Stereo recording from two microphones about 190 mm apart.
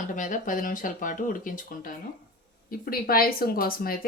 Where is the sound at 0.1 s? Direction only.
45° left (ahead or behind).